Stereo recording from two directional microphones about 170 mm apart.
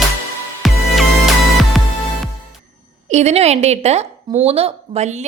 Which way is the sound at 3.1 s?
40° right (ahead or behind).